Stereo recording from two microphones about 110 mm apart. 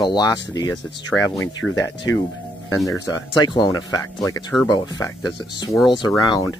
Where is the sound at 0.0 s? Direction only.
40° left (ahead or behind).